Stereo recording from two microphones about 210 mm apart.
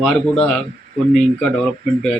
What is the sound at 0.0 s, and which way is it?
A man's voice, centre (ahead or behind).